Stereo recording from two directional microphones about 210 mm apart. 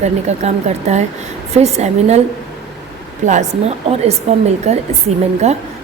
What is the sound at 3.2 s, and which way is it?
A woman's voice, 35° right (ahead or behind).